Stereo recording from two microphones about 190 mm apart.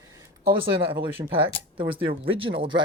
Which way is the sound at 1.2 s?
30° right (ahead or behind).